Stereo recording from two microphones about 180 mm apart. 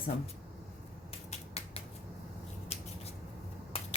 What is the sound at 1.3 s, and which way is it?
Finger snapping, 35° left (ahead or behind).